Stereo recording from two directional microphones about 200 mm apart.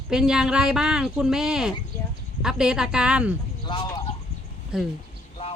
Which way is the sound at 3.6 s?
20° left (ahead or behind).